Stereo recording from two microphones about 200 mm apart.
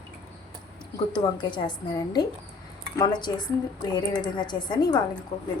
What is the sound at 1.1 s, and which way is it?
A woman's voice, 20° left (ahead or behind).